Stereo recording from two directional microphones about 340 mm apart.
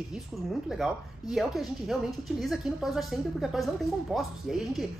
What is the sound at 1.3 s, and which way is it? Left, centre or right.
Speech, centre.